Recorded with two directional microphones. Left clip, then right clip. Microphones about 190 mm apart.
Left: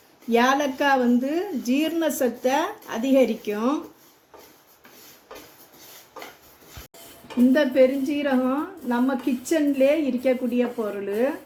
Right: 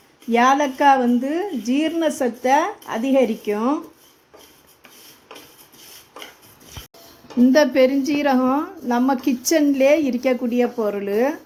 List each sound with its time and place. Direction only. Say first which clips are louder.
0.3 s a woman's voice: right 4 dB; 45° right (ahead or behind)
7.5 s a woman's voice: right 3 dB; 50° right (ahead or behind)